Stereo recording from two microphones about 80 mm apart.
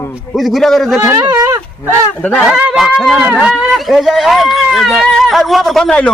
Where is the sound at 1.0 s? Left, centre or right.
Right.